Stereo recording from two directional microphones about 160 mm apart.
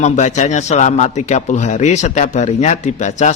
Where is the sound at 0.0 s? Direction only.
45° left (ahead or behind).